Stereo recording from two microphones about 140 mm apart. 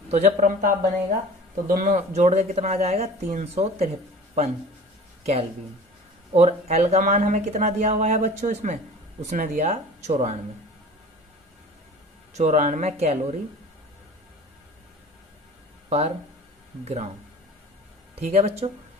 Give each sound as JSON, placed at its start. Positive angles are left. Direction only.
{"t": 0.1, "sound": "speech", "side_deg": -55}
{"t": 5.2, "sound": "speech", "side_deg": -45}
{"t": 12.3, "sound": "speech", "side_deg": -55}
{"t": 15.9, "sound": "speech", "side_deg": -50}
{"t": 18.1, "sound": "speech", "side_deg": -50}